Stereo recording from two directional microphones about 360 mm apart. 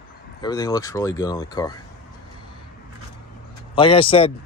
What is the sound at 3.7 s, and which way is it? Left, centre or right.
Speech, centre.